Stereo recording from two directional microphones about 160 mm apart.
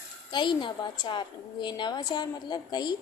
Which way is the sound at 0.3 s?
30° left (ahead or behind).